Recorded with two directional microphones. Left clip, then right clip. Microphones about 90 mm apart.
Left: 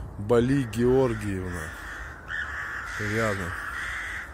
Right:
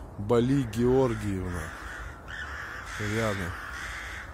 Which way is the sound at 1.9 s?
85° right.